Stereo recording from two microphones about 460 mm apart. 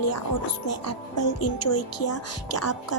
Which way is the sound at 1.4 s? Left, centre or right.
Left.